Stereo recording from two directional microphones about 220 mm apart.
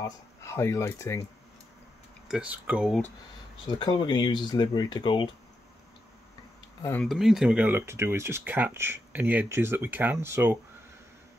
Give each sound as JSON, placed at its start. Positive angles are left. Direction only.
{"t": 0.0, "sound": "speech", "side_deg": 15}
{"t": 2.2, "sound": "speech", "side_deg": -5}
{"t": 3.6, "sound": "speech", "side_deg": 20}
{"t": 6.8, "sound": "speech", "side_deg": 5}